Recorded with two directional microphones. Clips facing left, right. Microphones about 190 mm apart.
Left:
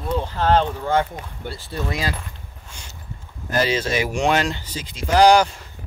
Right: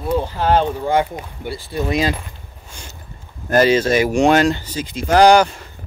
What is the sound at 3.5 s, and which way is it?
Speech, 50° right (ahead or behind).